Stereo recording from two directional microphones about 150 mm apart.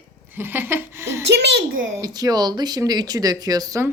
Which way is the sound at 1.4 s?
90° right.